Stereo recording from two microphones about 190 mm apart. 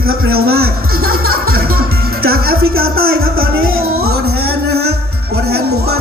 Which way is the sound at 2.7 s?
90° right.